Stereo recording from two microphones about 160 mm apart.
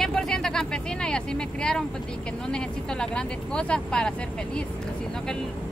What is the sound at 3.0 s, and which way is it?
A woman's voice, 5° left (ahead or behind).